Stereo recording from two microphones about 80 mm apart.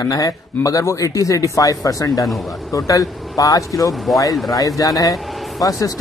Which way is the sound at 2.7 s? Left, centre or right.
Left.